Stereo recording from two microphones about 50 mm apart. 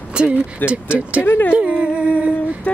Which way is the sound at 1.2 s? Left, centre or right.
Left.